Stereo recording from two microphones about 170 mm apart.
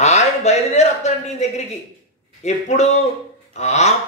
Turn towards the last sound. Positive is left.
turn(degrees=40)  # may be behind; listen again after turning